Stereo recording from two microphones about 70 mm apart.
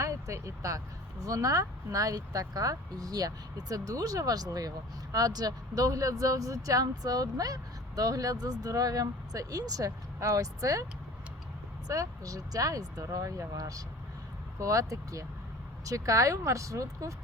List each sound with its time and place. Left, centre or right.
0.0 s speech: right
11.9 s speech: right